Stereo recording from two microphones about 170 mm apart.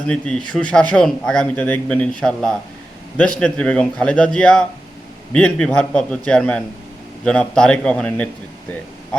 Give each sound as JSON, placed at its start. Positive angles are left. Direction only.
{"t": 0.1, "sound": "speech", "side_deg": 5}